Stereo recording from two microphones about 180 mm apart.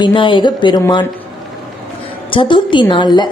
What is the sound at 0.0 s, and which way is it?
Speech, 30° left (ahead or behind).